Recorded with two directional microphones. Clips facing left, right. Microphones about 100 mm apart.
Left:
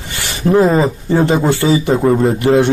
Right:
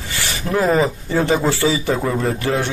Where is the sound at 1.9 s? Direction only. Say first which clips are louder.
Left 8 dB; 30° left (ahead or behind).